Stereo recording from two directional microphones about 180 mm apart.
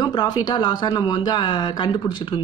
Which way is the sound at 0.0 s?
20° left (ahead or behind).